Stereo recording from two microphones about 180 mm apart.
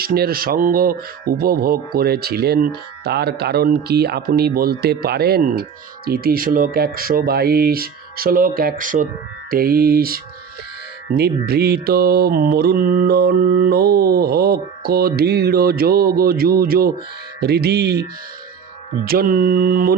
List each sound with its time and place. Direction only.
0.0 s speech: 55° right (ahead or behind)
11.4 s speech: 60° right (ahead or behind)
19.0 s mantra: 55° right (ahead or behind)